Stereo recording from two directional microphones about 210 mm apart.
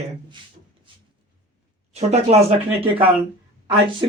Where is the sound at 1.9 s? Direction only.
30° right (ahead or behind).